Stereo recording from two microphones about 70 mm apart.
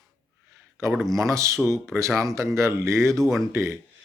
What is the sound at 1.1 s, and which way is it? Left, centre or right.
Speech, right.